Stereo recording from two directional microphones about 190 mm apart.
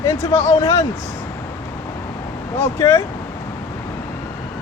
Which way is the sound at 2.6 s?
15° left (ahead or behind).